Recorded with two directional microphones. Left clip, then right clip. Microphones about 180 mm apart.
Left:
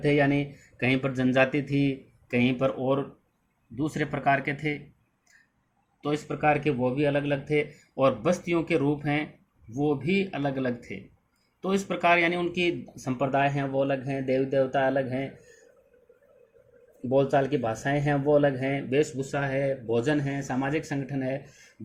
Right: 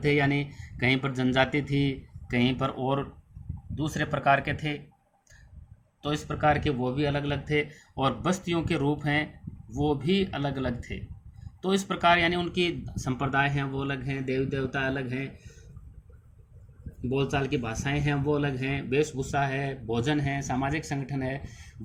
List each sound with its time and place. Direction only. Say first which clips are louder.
0.0 s speech: left 2 dB; 35° right (ahead or behind)
6.0 s speech: even; 40° right (ahead or behind)
17.3 s speech: left 5 dB; 35° right (ahead or behind)
19.9 s speech: right 2 dB; 40° right (ahead or behind)